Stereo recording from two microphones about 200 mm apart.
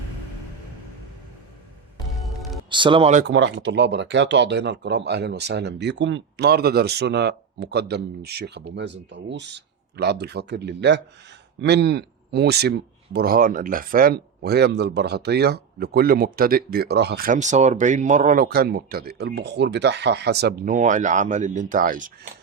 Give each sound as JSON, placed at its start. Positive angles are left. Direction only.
{"t": 2.1, "sound": "music", "side_deg": 0}
{"t": 2.6, "sound": "speech", "side_deg": -25}
{"t": 3.2, "sound": "speech", "side_deg": -65}